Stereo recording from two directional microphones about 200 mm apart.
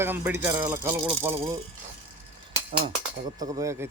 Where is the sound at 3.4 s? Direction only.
15° right (ahead or behind).